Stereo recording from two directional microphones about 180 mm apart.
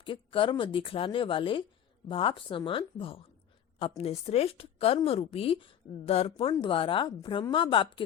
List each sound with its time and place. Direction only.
0.0 s a woman's voice: 30° left (ahead or behind)